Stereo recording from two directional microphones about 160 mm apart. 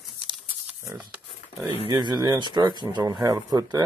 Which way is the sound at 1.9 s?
25° right (ahead or behind).